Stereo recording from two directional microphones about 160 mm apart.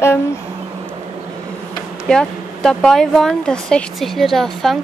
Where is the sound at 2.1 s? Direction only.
5° left (ahead or behind).